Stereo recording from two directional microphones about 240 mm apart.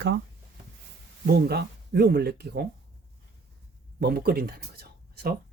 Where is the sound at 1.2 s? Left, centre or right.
Right.